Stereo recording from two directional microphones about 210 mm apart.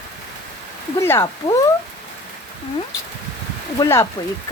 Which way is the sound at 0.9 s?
15° left (ahead or behind).